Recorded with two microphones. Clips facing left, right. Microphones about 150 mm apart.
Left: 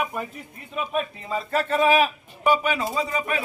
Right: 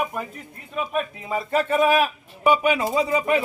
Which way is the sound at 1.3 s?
15° right (ahead or behind).